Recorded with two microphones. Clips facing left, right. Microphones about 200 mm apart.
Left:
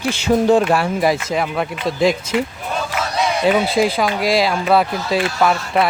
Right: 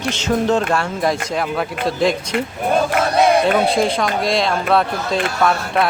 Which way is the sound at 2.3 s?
55° right (ahead or behind).